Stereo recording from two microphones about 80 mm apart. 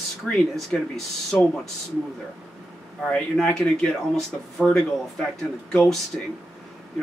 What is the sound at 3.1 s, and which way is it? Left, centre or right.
Speech, centre.